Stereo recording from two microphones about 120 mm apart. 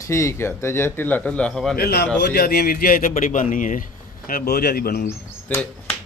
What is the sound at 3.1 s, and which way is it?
Speech, 90° left.